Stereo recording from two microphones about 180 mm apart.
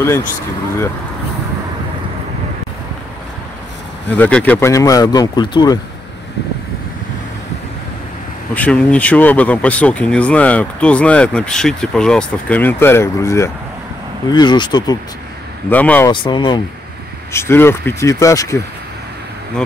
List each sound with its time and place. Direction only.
4.1 s speech: 10° left (ahead or behind); by 5.8 s 25° left (ahead or behind)
8.5 s speech: 5° left (ahead or behind); by 15.0 s 25° left (ahead or behind)
15.7 s speech: 10° left (ahead or behind)
16.1 s speech: 25° left (ahead or behind)
17.3 s speech: 15° left (ahead or behind)